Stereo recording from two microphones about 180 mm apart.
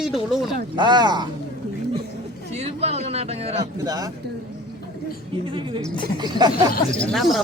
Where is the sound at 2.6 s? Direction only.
35° right (ahead or behind).